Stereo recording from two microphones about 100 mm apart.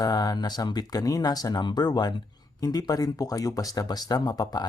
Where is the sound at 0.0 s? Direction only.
40° left (ahead or behind).